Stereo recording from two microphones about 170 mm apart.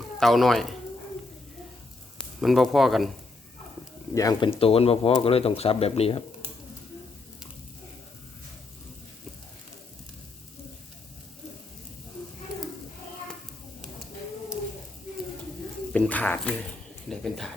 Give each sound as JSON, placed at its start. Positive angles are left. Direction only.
{"t": 0.2, "sound": "speech", "side_deg": 0}
{"t": 2.1, "sound": "speech", "side_deg": 0}
{"t": 4.1, "sound": "speech", "side_deg": 20}
{"t": 15.9, "sound": "a sound", "side_deg": 5}
{"t": 17.1, "sound": "speech", "side_deg": 0}